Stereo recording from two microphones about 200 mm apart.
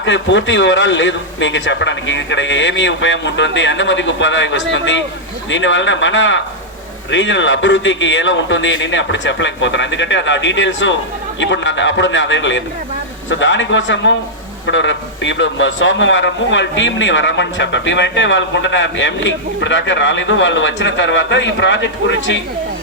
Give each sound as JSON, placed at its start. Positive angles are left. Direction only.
{"t": 0.0, "sound": "a man's voice", "side_deg": 65}